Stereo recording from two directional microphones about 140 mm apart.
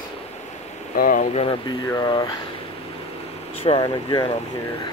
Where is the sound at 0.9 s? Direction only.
85° left.